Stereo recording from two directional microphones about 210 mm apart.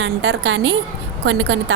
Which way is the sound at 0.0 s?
65° right (ahead or behind).